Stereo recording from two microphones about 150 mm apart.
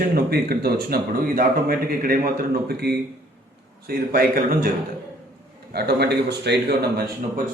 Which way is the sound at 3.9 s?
75° right (ahead or behind).